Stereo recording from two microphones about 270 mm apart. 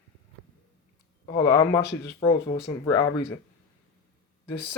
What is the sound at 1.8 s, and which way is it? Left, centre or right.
Speech, left.